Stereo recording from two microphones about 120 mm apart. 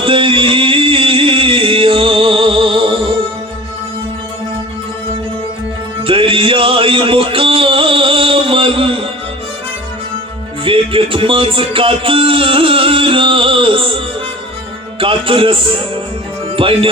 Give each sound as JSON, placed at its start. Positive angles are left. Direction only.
{"t": 0.0, "sound": "music", "side_deg": -45}
{"t": 6.0, "sound": "music", "side_deg": -50}
{"t": 10.6, "sound": "music", "side_deg": -50}